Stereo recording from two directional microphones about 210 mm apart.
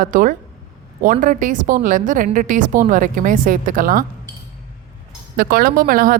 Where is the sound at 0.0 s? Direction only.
40° right (ahead or behind).